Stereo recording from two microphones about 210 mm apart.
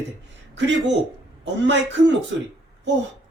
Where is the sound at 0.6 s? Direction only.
55° right (ahead or behind).